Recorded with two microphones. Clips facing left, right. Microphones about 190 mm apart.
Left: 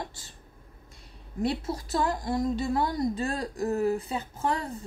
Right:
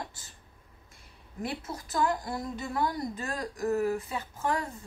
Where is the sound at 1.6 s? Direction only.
30° left (ahead or behind).